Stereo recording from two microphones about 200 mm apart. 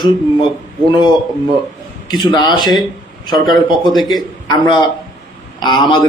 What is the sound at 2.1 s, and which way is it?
A man's voice, 20° left (ahead or behind).